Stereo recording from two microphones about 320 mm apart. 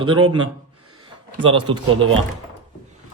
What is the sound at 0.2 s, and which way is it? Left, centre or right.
Speech, right.